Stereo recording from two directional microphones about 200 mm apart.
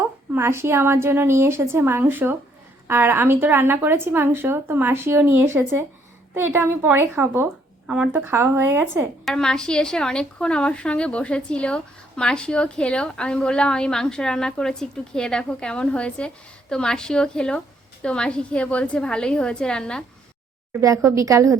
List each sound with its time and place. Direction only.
0.3 s speech: 10° right (ahead or behind)
9.2 s a woman's voice: 5° left (ahead or behind)
20.8 s speech: 15° right (ahead or behind)